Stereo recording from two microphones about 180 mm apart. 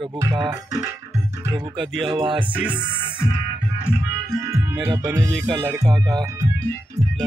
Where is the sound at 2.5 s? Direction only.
10° right (ahead or behind).